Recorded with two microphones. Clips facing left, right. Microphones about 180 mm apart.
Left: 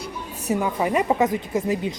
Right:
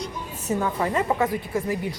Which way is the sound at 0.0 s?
15° left (ahead or behind).